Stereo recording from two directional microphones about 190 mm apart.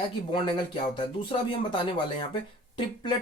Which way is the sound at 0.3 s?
25° left (ahead or behind).